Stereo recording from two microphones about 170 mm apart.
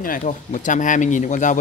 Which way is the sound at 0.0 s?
50° left (ahead or behind).